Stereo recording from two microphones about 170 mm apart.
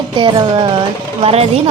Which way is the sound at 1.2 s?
40° right (ahead or behind).